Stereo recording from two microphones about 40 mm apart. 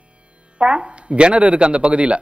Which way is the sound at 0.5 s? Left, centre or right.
Right.